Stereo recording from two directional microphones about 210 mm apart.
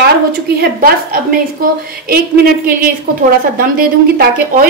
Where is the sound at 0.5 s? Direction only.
45° right (ahead or behind).